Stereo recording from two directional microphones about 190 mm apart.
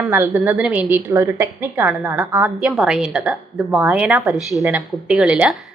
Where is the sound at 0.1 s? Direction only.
10° right (ahead or behind).